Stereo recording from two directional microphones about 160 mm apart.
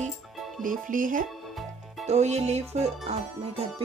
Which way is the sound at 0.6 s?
60° right (ahead or behind).